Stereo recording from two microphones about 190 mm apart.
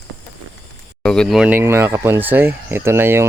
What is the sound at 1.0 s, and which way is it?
Speech, 5° left (ahead or behind).